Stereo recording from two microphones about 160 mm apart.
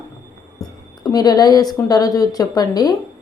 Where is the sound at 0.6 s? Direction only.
20° left (ahead or behind).